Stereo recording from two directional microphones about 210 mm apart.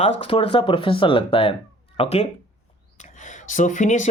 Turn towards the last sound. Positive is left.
turn(degrees=35)  # may be behind; listen again after turning